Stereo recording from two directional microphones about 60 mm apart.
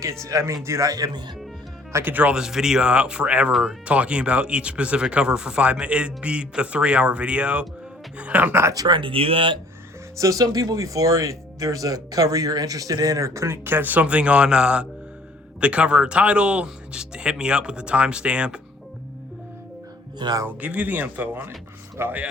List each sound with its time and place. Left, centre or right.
0.0 s a man's voice: right
0.9 s speech: right
2.0 s speech: right
2.3 s speech: centre
8.2 s speech: right
8.8 s speech: right
10.2 s speech: right
13.7 s speech: right; by 18.6 s centre
20.5 s speech: right
22.0 s a man's voice: right